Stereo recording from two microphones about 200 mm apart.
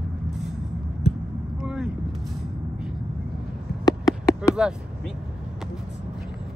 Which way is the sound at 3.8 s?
15° left (ahead or behind).